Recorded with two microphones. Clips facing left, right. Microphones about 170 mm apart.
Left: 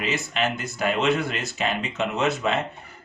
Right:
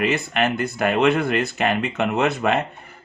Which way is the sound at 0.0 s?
60° right (ahead or behind).